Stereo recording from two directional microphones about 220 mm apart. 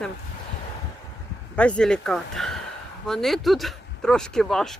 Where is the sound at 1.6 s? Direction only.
5° left (ahead or behind).